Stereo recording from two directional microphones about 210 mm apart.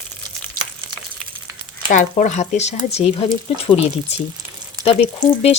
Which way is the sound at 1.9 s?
35° left (ahead or behind).